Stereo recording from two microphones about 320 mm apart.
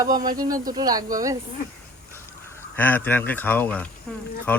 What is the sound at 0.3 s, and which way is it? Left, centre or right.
Speech, centre.